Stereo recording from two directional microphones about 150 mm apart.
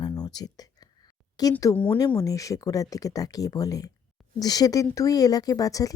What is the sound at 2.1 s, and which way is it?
A woman's voice, 20° left (ahead or behind).